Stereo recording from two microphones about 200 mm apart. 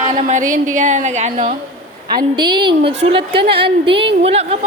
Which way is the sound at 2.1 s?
20° right (ahead or behind).